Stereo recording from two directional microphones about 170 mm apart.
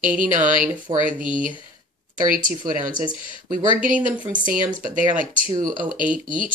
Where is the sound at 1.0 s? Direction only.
50° right (ahead or behind).